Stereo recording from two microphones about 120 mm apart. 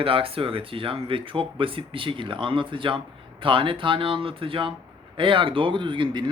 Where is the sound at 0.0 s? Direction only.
50° right (ahead or behind).